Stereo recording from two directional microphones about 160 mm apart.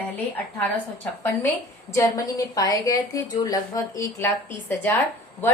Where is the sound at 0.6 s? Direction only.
10° left (ahead or behind).